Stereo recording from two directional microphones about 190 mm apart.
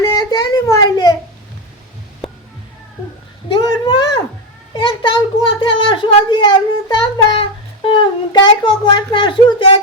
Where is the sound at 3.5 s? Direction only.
25° left (ahead or behind).